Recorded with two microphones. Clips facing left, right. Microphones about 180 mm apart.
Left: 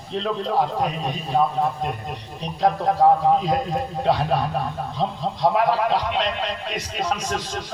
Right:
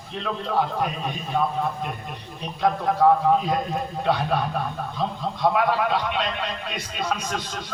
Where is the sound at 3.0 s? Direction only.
35° left (ahead or behind).